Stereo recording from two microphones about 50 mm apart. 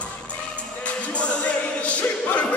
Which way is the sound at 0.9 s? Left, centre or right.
Left.